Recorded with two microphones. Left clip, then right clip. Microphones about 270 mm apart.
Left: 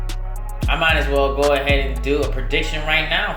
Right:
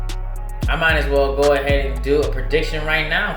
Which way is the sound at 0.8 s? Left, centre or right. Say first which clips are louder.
Right 1 dB; left.